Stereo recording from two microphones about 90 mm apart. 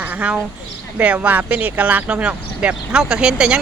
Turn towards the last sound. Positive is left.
turn(degrees=-10)  # may be behind; listen again after turning